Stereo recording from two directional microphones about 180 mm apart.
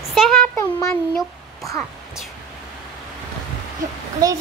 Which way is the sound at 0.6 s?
15° left (ahead or behind).